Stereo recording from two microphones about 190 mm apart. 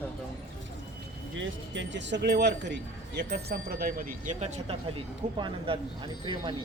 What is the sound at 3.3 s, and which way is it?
Speech, 55° right (ahead or behind).